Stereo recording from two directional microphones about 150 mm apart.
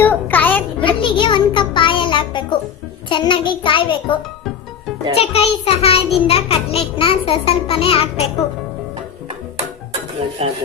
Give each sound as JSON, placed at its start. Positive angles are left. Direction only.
{"t": 0.0, "sound": "a sound", "side_deg": 10}
{"t": 0.9, "sound": "music", "side_deg": 35}
{"t": 3.1, "sound": "a child's voice", "side_deg": 35}
{"t": 10.4, "sound": "speech", "side_deg": -40}